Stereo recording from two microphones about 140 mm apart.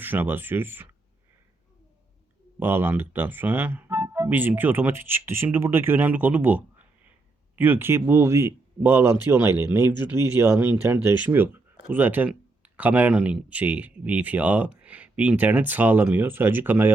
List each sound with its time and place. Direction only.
0.0 s speech: 15° right (ahead or behind)
2.6 s speech: 15° right (ahead or behind)